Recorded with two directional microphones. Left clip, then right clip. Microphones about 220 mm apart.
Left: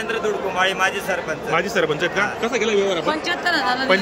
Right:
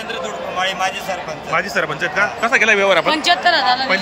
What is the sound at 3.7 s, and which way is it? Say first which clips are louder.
Speech: right 1 dB; centre (ahead or behind).